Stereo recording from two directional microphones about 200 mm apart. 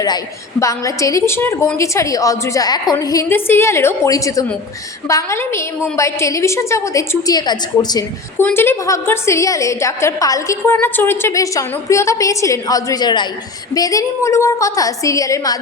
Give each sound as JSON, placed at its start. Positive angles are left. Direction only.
{"t": 0.6, "sound": "a woman's voice", "side_deg": 15}